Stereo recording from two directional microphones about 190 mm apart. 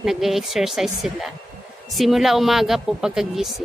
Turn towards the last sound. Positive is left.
turn(degrees=0)  # may be behind; listen again after turning